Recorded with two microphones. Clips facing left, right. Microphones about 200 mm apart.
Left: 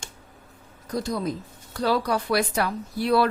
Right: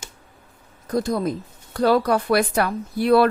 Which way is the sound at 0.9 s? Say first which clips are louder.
Right 5 dB; 50° right (ahead or behind).